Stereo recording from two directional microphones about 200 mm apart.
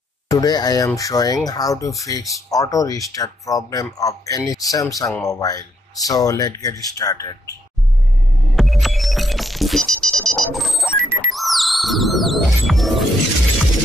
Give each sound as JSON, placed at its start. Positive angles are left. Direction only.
{"t": 0.3, "sound": "speech", "side_deg": 20}
{"t": 8.5, "sound": "music", "side_deg": 0}